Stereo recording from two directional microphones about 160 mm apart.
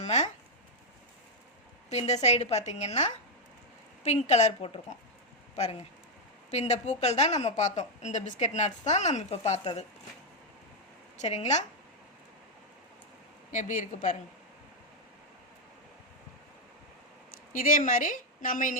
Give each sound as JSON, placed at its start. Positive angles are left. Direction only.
{"t": 0.0, "sound": "a sound", "side_deg": 45}
{"t": 1.9, "sound": "a woman's voice", "side_deg": 45}
{"t": 11.2, "sound": "a woman's voice", "side_deg": 45}
{"t": 13.5, "sound": "a woman's voice", "side_deg": 55}
{"t": 17.5, "sound": "a woman's voice", "side_deg": 60}